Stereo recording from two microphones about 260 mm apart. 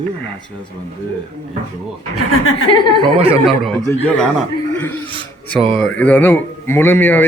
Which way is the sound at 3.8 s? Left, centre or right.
Centre.